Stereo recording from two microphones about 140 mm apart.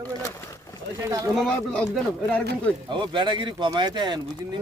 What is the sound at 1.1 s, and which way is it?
Speech, 25° right (ahead or behind).